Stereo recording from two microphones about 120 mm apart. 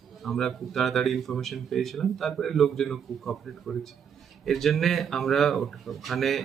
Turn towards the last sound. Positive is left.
turn(degrees=0)  # may be behind; listen again after turning